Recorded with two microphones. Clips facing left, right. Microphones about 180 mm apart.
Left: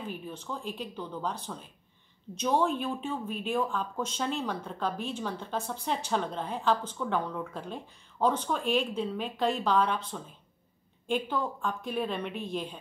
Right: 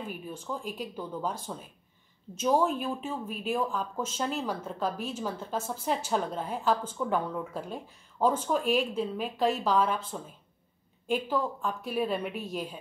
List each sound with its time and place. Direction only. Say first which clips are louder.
0.1 s speech: right 1 dB; 10° right (ahead or behind)
2.3 s speech: right 1 dB; 5° right (ahead or behind)